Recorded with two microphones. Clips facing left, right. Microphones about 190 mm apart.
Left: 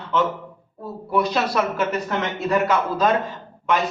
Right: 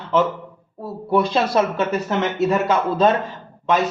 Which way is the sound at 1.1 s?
30° right (ahead or behind).